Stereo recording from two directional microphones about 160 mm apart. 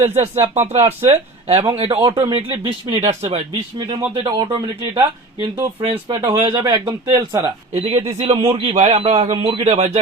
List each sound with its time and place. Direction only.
0.0 s speech: 45° right (ahead or behind)
4.9 s speech: 20° right (ahead or behind)
6.1 s speech: 35° right (ahead or behind)
7.7 s speech: 35° right (ahead or behind)
9.3 s speech: 35° right (ahead or behind)